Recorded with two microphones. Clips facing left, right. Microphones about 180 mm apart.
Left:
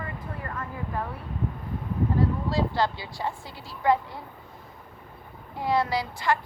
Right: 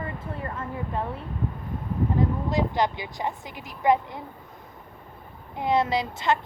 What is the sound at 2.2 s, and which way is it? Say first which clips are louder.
A woman's voice: right 1 dB; 20° right (ahead or behind).